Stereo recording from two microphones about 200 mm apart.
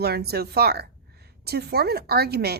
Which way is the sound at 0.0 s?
55° right (ahead or behind).